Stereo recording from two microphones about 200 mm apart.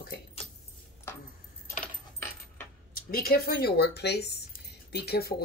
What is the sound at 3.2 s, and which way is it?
Speech, 50° left (ahead or behind).